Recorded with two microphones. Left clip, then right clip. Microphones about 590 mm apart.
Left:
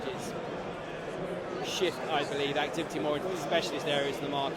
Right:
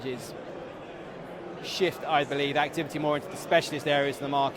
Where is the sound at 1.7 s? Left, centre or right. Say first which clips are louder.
Right 5 dB; right.